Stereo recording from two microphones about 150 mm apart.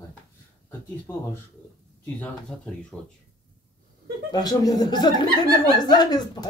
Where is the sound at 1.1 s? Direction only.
15° left (ahead or behind).